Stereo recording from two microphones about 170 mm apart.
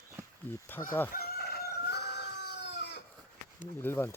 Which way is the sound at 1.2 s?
65° left (ahead or behind).